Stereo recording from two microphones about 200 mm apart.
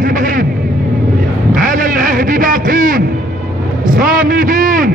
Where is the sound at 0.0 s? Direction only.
45° right (ahead or behind).